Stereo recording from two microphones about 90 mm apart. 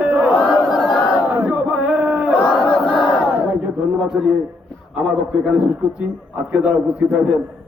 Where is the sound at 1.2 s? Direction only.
15° right (ahead or behind).